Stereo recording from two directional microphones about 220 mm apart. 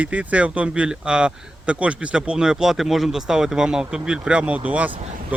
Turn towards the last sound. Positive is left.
turn(degrees=-30)  # may be behind; listen again after turning